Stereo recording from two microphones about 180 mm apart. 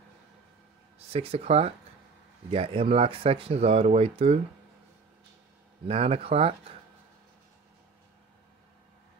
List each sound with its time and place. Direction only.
0.9 s speech: 35° right (ahead or behind)
5.9 s speech: 35° right (ahead or behind)